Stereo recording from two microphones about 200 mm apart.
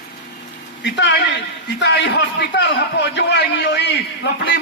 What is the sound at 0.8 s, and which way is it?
A man's voice, 60° left (ahead or behind).